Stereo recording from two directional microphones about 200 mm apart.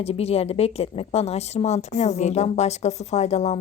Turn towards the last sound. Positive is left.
turn(degrees=35)  # may be behind; listen again after turning